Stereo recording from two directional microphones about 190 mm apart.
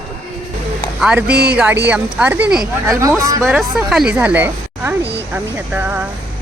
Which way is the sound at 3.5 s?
Centre (ahead or behind).